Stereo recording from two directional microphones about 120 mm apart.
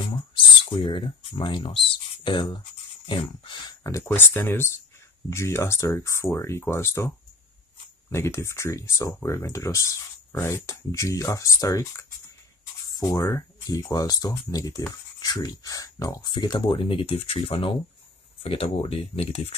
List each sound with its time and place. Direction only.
0.1 s a sound: 45° left (ahead or behind)
3.1 s speech: 40° left (ahead or behind)
3.8 s speech: 20° left (ahead or behind)
8.1 s speech: 20° left (ahead or behind); by 19.5 s 55° left (ahead or behind)